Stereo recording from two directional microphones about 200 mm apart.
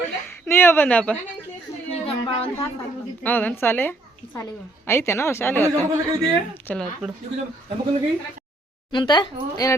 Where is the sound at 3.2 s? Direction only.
10° left (ahead or behind).